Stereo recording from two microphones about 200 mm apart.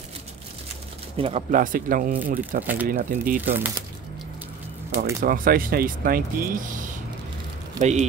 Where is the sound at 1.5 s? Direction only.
40° right (ahead or behind).